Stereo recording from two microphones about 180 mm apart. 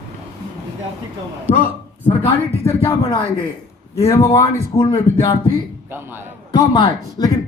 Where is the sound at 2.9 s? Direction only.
20° left (ahead or behind).